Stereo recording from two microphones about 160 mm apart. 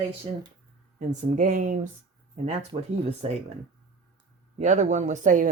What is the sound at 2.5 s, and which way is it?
Speech, 40° right (ahead or behind).